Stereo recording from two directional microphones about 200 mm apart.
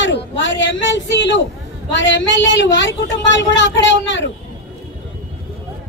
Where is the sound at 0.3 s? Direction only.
65° left (ahead or behind).